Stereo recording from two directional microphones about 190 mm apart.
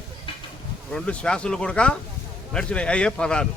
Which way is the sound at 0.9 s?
5° left (ahead or behind).